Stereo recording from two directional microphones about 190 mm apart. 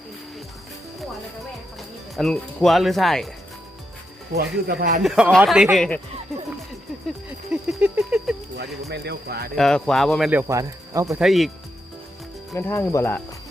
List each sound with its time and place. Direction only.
2.1 s speech: centre (ahead or behind)
4.4 s speech: 55° right (ahead or behind)
5.0 s speech: 5° right (ahead or behind)
7.3 s a sound: 5° right (ahead or behind)
8.9 s speech: 55° right (ahead or behind)
9.6 s speech: centre (ahead or behind)
10.5 s speech: 15° right (ahead or behind)
11.2 s speech: centre (ahead or behind)
12.5 s speech: 10° left (ahead or behind)